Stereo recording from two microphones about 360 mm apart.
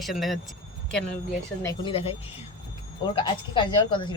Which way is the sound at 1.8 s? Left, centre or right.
Centre.